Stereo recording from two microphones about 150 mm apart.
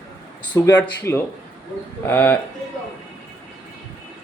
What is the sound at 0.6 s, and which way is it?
Speech, 20° left (ahead or behind).